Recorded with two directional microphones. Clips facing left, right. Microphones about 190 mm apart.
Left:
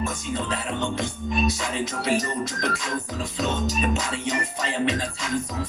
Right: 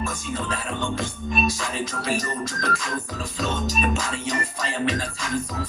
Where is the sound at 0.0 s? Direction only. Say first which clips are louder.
Left 1 dB; 20° left (ahead or behind).